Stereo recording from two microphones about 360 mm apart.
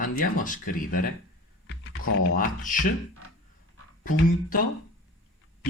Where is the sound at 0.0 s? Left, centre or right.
Left.